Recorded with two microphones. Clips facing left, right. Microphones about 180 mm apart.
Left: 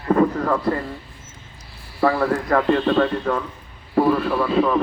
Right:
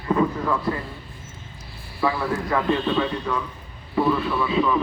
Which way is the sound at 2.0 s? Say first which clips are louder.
Left 5 dB; 50° left (ahead or behind).